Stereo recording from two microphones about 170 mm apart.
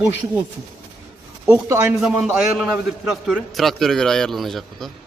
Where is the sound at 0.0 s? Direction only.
10° right (ahead or behind).